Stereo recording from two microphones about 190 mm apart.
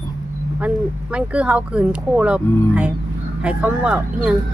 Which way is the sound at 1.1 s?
5° right (ahead or behind).